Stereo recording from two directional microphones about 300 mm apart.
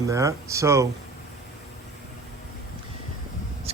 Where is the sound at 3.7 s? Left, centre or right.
Centre.